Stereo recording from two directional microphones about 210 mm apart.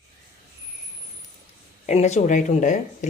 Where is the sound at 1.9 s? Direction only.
30° left (ahead or behind).